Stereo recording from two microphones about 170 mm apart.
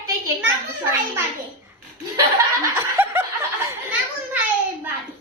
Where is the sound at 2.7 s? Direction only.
15° right (ahead or behind).